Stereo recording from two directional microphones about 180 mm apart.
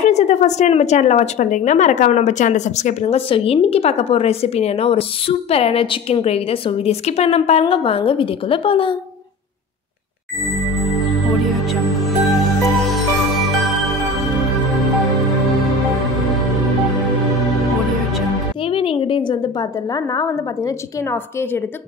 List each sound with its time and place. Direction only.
0.0 s a woman's voice: 40° left (ahead or behind)
11.5 s music: centre (ahead or behind)
18.6 s a woman's voice: 30° left (ahead or behind); by 21.6 s 10° left (ahead or behind)